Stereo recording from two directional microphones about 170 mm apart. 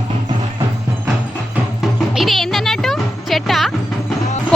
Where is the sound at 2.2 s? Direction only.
Centre (ahead or behind).